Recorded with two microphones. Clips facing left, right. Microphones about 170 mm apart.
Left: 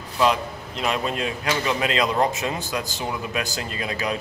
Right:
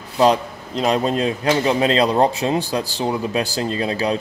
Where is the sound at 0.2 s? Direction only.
35° right (ahead or behind).